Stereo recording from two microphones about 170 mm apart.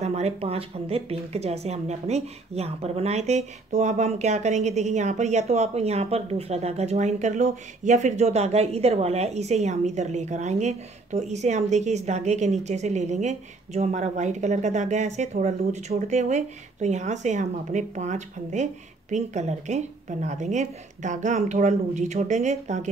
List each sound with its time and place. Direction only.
0.0 s speech: 40° right (ahead or behind)